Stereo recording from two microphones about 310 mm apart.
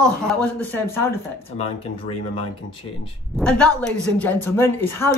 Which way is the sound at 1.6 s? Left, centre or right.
Centre.